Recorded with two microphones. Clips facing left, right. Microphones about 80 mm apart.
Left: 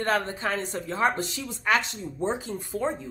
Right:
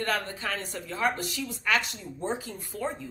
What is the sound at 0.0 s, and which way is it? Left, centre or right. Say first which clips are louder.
A woman's voice: left 4 dB; left.